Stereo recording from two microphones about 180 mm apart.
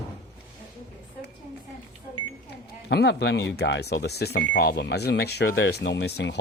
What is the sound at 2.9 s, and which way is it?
Speech, 70° left (ahead or behind).